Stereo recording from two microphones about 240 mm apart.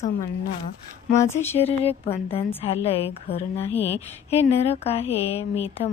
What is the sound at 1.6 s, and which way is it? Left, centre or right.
A woman's voice, left.